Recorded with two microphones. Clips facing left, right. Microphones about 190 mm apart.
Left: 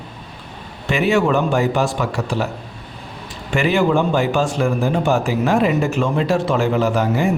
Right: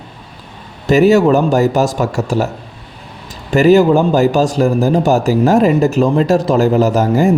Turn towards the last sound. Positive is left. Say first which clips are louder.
# right 6 dB
turn(degrees=-40)  # may be behind; listen again after turning